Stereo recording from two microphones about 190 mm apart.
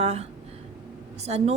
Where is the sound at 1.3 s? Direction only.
35° right (ahead or behind).